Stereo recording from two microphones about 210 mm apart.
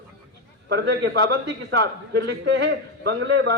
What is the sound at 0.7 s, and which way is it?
A man's voice, 55° right (ahead or behind).